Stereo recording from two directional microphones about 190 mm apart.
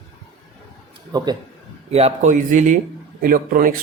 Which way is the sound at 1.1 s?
20° right (ahead or behind).